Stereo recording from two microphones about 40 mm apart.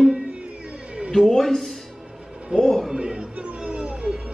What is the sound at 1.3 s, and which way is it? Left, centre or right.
A man's voice, centre.